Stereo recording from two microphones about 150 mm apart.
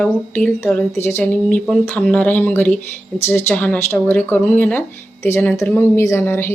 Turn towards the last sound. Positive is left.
turn(degrees=15)  # may be behind; listen again after turning